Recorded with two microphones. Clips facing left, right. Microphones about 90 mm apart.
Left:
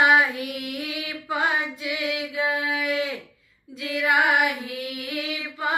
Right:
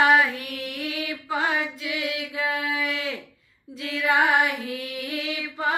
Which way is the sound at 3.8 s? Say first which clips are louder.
Left 2 dB; 20° left (ahead or behind).